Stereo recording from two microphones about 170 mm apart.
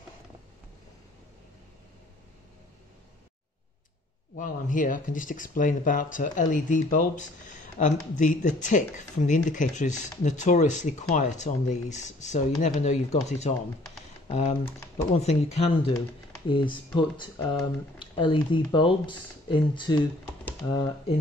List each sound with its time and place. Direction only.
4.4 s speech: 50° left (ahead or behind); by 21.2 s 25° left (ahead or behind)